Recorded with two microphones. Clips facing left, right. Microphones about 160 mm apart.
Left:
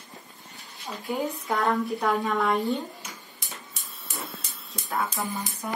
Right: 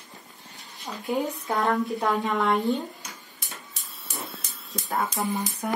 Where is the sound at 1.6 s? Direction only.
20° right (ahead or behind).